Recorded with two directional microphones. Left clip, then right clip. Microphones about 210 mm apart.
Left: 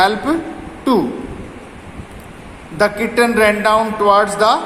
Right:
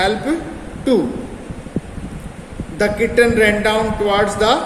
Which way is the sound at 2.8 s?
15° left (ahead or behind).